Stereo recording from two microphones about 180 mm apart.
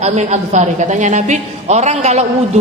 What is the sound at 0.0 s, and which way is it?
A man's voice, 40° right (ahead or behind).